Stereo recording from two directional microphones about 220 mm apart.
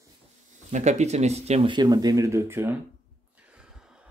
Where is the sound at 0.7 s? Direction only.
30° right (ahead or behind); by 2.8 s 10° right (ahead or behind).